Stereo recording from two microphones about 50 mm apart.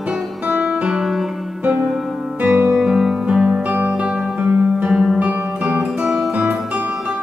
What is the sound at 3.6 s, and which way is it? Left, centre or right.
Music, right.